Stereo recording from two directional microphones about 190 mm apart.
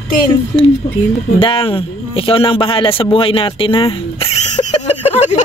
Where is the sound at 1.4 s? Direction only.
30° left (ahead or behind).